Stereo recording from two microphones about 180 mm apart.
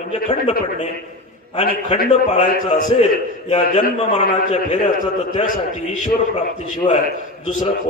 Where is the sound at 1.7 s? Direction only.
55° left (ahead or behind).